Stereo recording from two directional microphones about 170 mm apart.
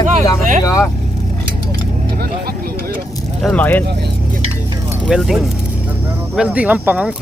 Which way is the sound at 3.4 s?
5° left (ahead or behind).